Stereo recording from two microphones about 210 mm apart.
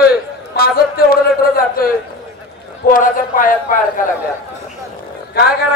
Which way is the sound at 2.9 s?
40° left (ahead or behind).